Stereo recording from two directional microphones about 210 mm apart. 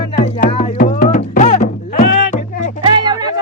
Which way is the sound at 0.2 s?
40° left (ahead or behind).